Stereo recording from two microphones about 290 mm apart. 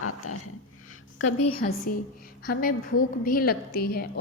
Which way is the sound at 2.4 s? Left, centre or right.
Left.